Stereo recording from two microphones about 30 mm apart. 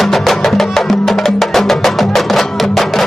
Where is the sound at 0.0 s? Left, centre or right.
Centre.